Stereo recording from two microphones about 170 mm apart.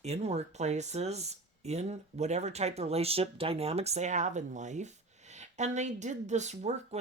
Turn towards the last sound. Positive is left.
turn(degrees=-40)  # may be behind; listen again after turning